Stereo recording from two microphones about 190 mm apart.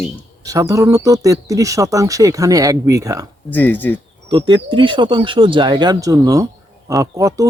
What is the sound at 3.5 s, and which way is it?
Speech, 10° left (ahead or behind).